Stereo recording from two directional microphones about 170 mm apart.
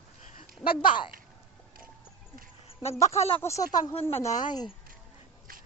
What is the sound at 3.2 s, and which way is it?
Speech, 35° left (ahead or behind).